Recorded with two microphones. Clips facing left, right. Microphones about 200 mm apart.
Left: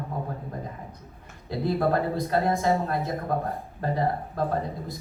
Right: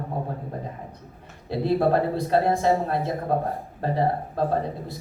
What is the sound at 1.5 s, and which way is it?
Speech, 30° right (ahead or behind).